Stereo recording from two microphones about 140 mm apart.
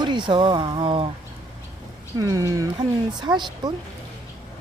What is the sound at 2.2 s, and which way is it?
Speech, 25° right (ahead or behind).